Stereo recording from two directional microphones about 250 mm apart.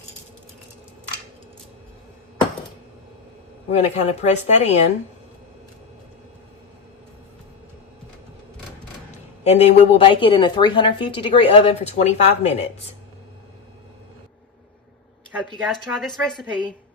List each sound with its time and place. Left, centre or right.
3.7 s a woman's voice: left
9.4 s a woman's voice: left
15.3 s a woman's voice: centre